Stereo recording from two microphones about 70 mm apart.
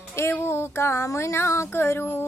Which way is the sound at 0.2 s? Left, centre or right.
Left.